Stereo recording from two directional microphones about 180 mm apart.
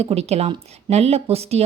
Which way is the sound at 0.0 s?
35° right (ahead or behind).